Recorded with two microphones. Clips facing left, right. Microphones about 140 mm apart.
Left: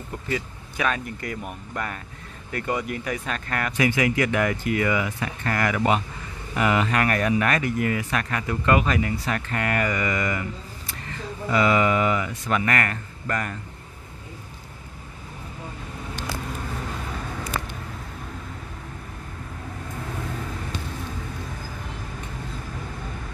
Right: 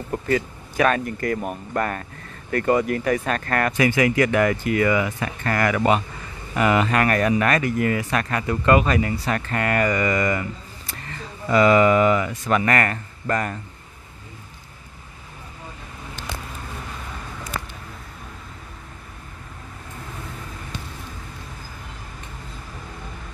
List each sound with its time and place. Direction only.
0.3 s speech: 50° right (ahead or behind)
11.5 s speech: 50° right (ahead or behind)